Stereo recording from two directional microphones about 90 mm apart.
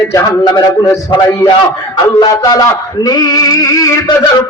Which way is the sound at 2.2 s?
50° left (ahead or behind).